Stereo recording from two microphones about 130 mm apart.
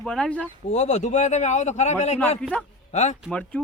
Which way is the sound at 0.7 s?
60° left (ahead or behind).